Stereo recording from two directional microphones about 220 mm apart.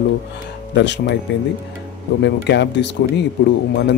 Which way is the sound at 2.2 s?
50° left (ahead or behind).